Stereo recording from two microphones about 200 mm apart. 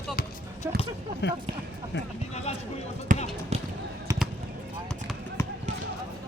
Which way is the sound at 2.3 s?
30° left (ahead or behind).